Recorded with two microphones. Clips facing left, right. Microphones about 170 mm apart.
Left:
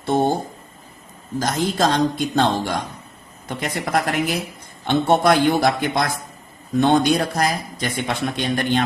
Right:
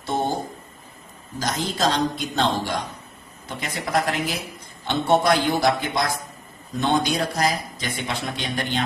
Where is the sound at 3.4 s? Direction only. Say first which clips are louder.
Left 4 dB; 55° left (ahead or behind).